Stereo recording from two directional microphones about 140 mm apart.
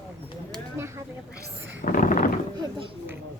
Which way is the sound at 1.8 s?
70° left (ahead or behind).